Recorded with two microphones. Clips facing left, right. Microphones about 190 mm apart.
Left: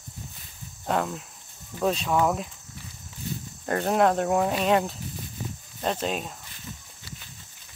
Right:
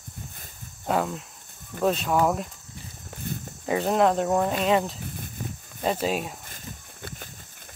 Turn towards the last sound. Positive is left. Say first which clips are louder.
# right 6 dB
turn(degrees=-50)  # may be behind; listen again after turning